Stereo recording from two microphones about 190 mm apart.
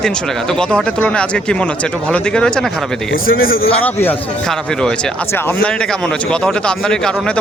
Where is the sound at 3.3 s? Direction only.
50° left (ahead or behind).